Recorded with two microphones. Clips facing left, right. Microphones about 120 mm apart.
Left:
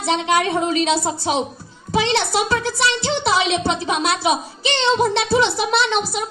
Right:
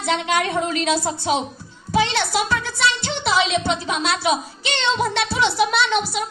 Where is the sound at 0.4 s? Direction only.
30° left (ahead or behind).